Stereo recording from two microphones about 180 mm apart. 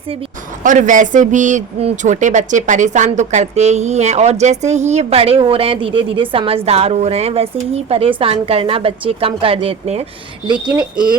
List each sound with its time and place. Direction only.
0.6 s speech: 45° right (ahead or behind); by 11.2 s 25° right (ahead or behind)